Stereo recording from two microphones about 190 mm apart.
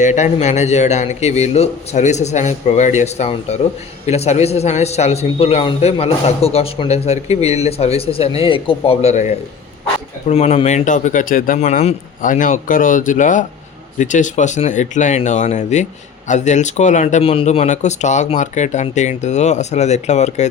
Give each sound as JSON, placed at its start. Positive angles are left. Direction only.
{"t": 0.0, "sound": "a man's voice", "side_deg": 40}